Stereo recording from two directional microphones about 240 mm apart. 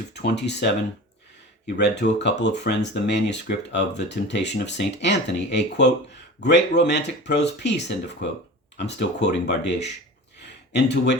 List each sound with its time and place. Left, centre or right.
0.1 s speech: left
1.8 s speech: left